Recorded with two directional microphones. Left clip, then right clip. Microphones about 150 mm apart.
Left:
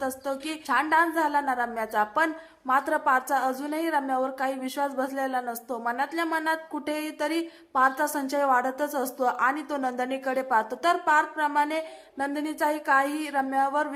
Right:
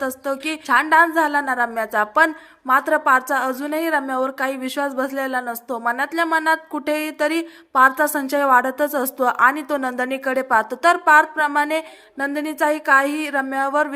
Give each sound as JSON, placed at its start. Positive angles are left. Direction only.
{"t": 0.0, "sound": "a woman's voice", "side_deg": -20}